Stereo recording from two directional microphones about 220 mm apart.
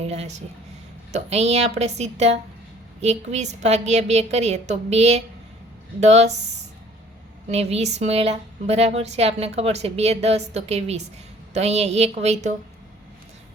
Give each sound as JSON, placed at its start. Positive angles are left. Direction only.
{"t": 0.0, "sound": "a woman's voice", "side_deg": -30}
{"t": 7.5, "sound": "a woman's voice", "side_deg": -30}